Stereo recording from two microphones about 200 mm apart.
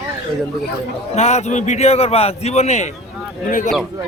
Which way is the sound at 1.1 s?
35° left (ahead or behind).